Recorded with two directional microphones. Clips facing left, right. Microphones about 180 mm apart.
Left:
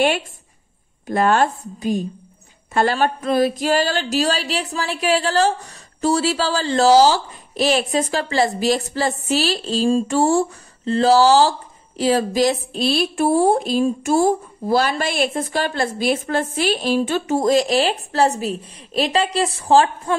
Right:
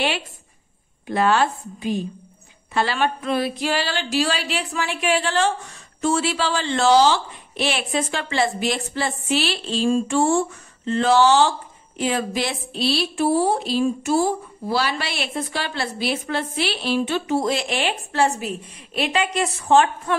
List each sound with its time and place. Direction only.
1.0 s speech: 45° left (ahead or behind)